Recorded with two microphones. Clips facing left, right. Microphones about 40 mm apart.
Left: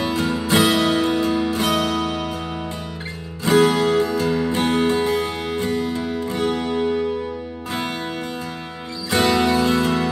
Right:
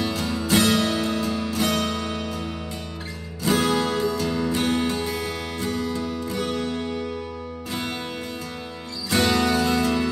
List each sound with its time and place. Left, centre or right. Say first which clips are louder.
0.0 s music: left 4 dB; left
3.4 s music: left 6 dB; centre
9.1 s music: left 3 dB; centre